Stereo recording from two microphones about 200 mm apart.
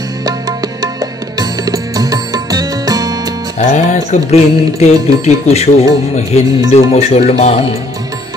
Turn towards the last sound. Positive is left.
turn(degrees=35)  # may be behind; listen again after turning